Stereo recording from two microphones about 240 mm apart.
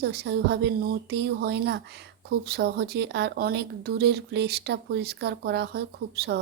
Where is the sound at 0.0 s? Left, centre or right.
Right.